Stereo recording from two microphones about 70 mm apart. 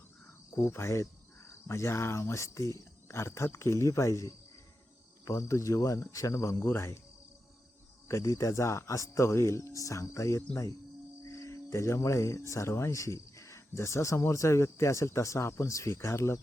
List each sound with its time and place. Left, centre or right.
0.5 s speech: left
8.0 s speech: left